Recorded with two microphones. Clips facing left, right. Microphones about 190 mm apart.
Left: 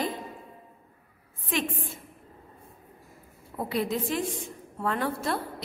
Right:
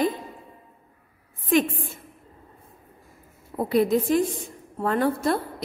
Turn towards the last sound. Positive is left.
turn(degrees=-40)  # may be behind; listen again after turning